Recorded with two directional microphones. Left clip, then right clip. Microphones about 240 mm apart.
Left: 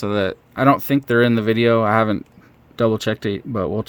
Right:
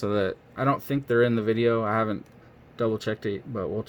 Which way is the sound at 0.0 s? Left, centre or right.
Left.